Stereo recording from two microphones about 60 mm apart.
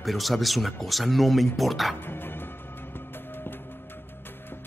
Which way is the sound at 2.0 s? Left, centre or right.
Left.